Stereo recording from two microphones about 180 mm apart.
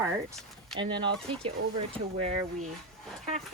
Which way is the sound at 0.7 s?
25° right (ahead or behind).